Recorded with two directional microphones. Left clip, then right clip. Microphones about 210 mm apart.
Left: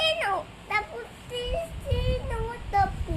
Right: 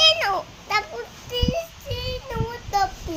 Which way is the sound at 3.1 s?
45° right (ahead or behind).